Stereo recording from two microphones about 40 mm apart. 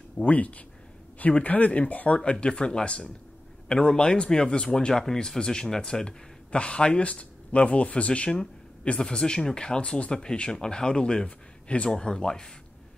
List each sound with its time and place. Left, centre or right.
0.2 s speech: left; by 12.4 s centre